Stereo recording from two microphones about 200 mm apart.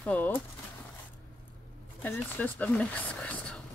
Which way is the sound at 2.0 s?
10° left (ahead or behind).